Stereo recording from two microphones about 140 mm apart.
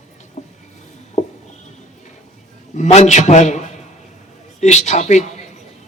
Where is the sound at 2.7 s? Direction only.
55° left (ahead or behind).